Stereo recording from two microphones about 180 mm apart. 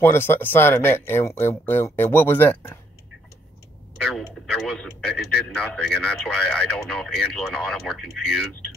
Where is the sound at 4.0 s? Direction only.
5° left (ahead or behind).